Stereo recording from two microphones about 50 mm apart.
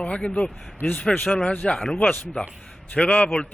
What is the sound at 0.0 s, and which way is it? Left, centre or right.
Speech, left.